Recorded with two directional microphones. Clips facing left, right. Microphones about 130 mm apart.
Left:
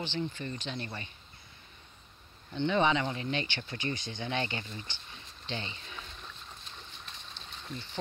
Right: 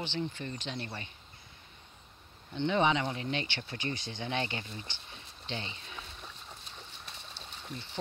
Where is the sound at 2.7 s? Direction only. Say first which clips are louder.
Even; 15° right (ahead or behind).